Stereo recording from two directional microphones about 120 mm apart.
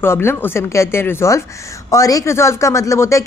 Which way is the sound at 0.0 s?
20° left (ahead or behind).